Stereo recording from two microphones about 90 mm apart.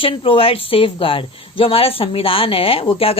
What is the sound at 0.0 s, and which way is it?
Speech, 85° left.